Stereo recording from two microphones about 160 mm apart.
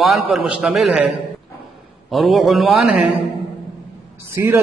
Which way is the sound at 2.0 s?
Centre (ahead or behind).